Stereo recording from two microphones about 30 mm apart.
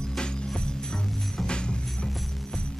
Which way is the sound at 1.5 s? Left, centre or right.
Left.